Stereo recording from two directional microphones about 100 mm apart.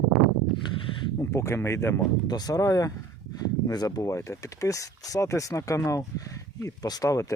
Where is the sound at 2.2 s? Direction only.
40° left (ahead or behind).